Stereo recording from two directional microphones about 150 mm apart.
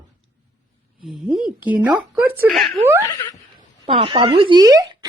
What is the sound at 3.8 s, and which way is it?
Speech, 35° right (ahead or behind).